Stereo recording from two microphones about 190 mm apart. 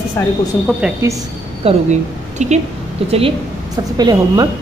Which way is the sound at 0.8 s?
5° right (ahead or behind).